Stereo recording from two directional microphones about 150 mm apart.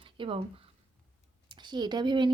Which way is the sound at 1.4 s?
30° right (ahead or behind).